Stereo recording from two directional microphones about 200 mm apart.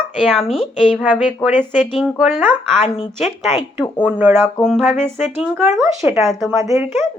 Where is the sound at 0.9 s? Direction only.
5° right (ahead or behind).